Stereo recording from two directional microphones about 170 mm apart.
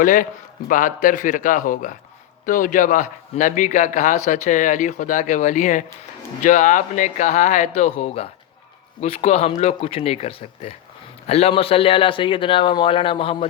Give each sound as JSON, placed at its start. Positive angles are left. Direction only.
{"t": 0.0, "sound": "a man's voice", "side_deg": 50}